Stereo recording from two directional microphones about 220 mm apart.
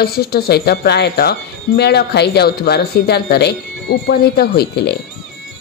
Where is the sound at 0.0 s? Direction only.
45° left (ahead or behind).